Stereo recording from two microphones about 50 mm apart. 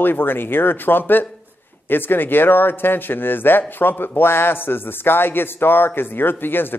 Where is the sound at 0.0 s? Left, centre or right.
Left.